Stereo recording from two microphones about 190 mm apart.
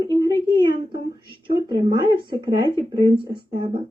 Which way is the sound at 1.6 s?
25° right (ahead or behind).